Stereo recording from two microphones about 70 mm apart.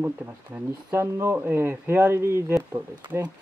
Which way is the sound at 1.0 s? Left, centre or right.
Right.